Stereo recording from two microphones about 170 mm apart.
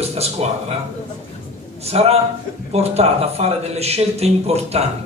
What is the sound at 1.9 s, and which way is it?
A man's voice, 35° right (ahead or behind).